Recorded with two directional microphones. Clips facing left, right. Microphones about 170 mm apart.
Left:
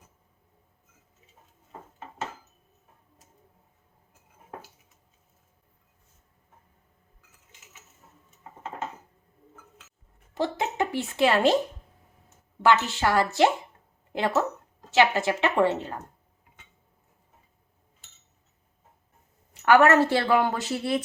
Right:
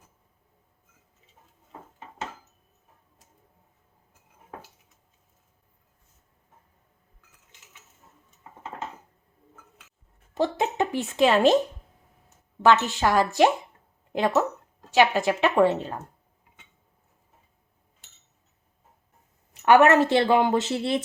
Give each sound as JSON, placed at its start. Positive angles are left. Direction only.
{"t": 10.3, "sound": "speech", "side_deg": -20}
{"t": 12.7, "sound": "a woman's voice", "side_deg": -15}
{"t": 19.6, "sound": "a woman's voice", "side_deg": -20}